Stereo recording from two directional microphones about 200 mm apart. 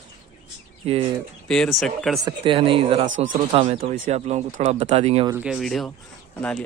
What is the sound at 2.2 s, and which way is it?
Speech, 25° right (ahead or behind).